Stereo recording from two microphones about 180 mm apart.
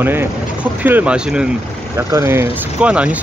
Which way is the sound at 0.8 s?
10° right (ahead or behind).